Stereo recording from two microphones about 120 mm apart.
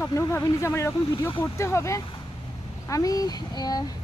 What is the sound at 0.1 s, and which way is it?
Speech, 30° left (ahead or behind).